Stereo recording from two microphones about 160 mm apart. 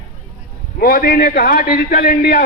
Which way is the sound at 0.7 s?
70° left (ahead or behind).